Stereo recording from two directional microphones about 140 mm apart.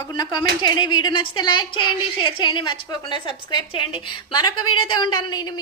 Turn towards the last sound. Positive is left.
turn(degrees=30)  # may be behind; listen again after turning